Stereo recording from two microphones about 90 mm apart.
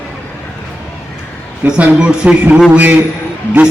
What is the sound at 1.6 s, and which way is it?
A man's voice, 10° right (ahead or behind).